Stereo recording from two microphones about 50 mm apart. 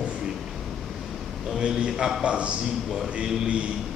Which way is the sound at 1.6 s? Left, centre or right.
Centre.